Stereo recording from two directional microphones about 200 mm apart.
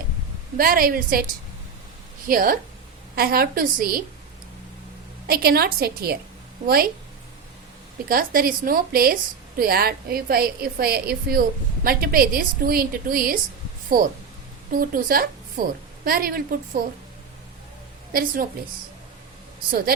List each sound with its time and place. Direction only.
0.5 s a woman's voice: 45° right (ahead or behind)
2.2 s a woman's voice: 45° right (ahead or behind)
5.2 s a woman's voice: 50° right (ahead or behind)
8.0 s a woman's voice: 45° right (ahead or behind)
14.7 s a woman's voice: 45° right (ahead or behind)
18.1 s a woman's voice: 45° right (ahead or behind)